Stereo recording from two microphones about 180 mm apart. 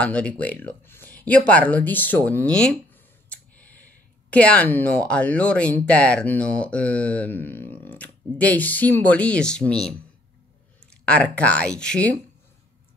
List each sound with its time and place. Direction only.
0.0 s speech: 5° left (ahead or behind)
3.3 s a sound: 10° left (ahead or behind)
4.3 s speech: 5° left (ahead or behind)
10.9 s speech: 5° left (ahead or behind)